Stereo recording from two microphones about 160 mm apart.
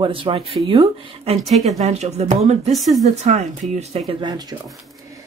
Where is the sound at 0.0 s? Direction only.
35° right (ahead or behind).